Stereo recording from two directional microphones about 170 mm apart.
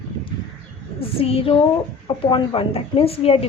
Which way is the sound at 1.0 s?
35° left (ahead or behind).